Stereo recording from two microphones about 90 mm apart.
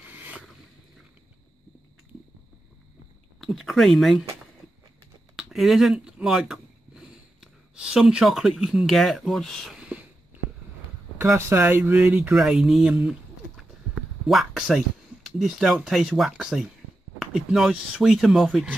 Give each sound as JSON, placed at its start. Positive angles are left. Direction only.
{"t": 0.0, "sound": "boat", "side_deg": -20}
{"t": 3.3, "sound": "speech", "side_deg": 0}
{"t": 5.3, "sound": "a sound", "side_deg": 0}
{"t": 5.9, "sound": "a sound", "side_deg": -15}
{"t": 6.2, "sound": "speech", "side_deg": -5}
{"t": 9.8, "sound": "a sound", "side_deg": -15}
{"t": 11.1, "sound": "speech", "side_deg": -30}
{"t": 12.3, "sound": "speech", "side_deg": -5}
{"t": 14.2, "sound": "speech", "side_deg": 0}